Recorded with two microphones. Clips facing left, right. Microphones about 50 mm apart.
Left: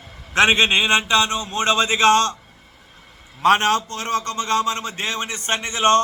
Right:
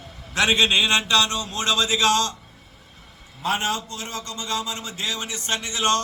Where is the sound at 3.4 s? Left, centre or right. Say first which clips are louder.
Left 8 dB; left.